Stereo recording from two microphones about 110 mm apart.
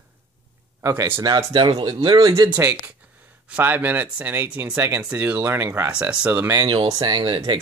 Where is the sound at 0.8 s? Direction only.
25° right (ahead or behind).